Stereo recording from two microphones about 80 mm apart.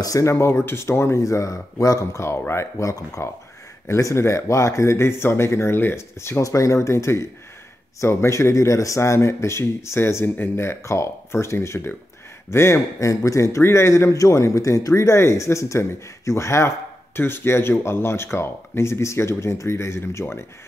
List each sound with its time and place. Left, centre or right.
0.0 s a man's voice: left